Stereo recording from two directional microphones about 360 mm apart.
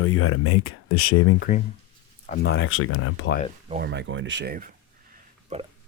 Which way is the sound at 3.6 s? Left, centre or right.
Right.